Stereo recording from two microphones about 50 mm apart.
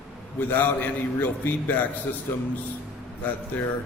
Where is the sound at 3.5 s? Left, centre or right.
Left.